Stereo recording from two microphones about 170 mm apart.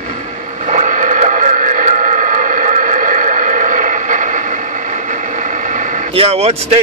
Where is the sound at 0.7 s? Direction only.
45° right (ahead or behind).